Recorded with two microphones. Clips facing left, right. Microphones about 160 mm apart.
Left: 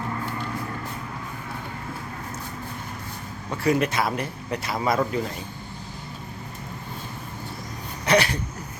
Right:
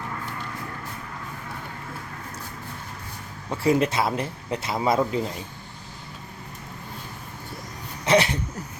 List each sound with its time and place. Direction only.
3.6 s speech: 25° right (ahead or behind)
8.0 s speech: 25° right (ahead or behind)